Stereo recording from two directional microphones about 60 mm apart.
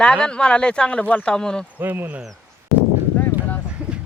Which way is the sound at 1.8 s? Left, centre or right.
Right.